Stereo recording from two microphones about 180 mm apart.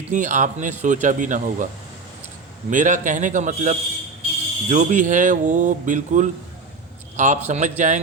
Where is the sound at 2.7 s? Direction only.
45° right (ahead or behind).